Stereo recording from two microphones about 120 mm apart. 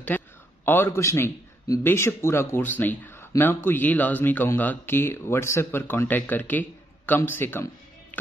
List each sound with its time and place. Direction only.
0.1 s a man's voice: 15° left (ahead or behind)